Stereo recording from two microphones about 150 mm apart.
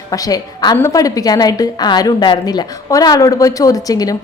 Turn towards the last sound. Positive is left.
turn(degrees=25)  # may be behind; listen again after turning